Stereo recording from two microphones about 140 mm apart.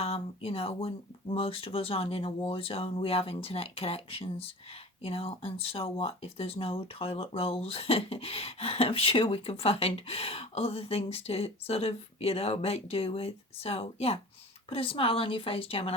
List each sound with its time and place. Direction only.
0.0 s a woman's voice: 45° left (ahead or behind)